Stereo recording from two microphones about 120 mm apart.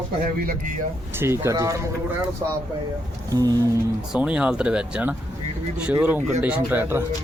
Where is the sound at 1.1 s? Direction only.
20° right (ahead or behind).